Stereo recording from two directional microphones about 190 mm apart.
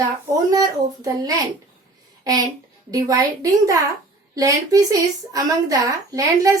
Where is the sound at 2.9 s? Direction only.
20° right (ahead or behind).